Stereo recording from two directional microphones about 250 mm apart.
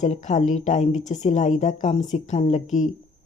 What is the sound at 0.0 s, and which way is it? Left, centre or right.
Speech, left.